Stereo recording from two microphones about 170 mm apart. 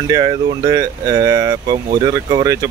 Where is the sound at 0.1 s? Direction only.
20° right (ahead or behind).